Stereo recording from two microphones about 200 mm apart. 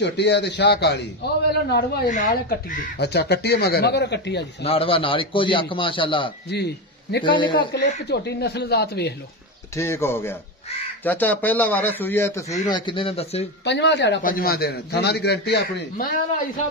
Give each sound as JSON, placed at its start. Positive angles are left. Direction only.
{"t": 0.0, "sound": "speech", "side_deg": 60}
{"t": 4.6, "sound": "a man's voice", "side_deg": 30}
{"t": 6.5, "sound": "a man's voice", "side_deg": 55}
{"t": 7.2, "sound": "a man's voice", "side_deg": 25}
{"t": 7.7, "sound": "speech", "side_deg": 55}
{"t": 9.8, "sound": "a man's voice", "side_deg": 15}
{"t": 13.7, "sound": "speech", "side_deg": 60}
{"t": 14.2, "sound": "a man's voice", "side_deg": 50}